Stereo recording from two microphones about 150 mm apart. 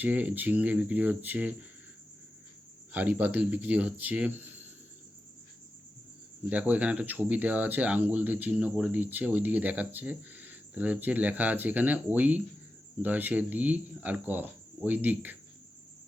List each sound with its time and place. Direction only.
0.0 s speech: 10° right (ahead or behind)
2.9 s speech: 10° right (ahead or behind)
6.5 s speech: 10° right (ahead or behind)